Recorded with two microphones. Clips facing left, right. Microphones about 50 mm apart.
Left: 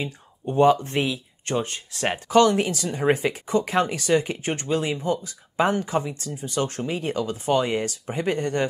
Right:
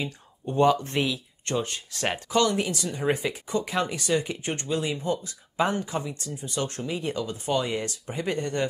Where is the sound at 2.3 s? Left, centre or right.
Left.